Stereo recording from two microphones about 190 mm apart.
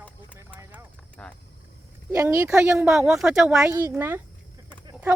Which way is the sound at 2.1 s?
15° right (ahead or behind).